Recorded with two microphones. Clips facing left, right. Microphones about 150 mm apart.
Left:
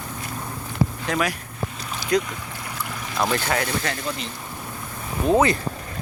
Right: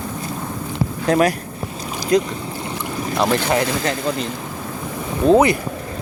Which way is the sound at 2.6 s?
30° right (ahead or behind).